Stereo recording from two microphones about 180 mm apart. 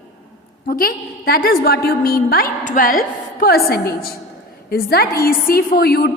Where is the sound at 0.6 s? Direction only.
55° left (ahead or behind).